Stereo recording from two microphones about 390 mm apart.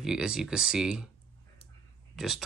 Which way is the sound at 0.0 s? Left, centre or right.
Centre.